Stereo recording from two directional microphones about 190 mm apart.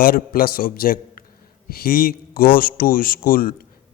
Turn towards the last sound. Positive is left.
turn(degrees=50)  # may be behind; listen again after turning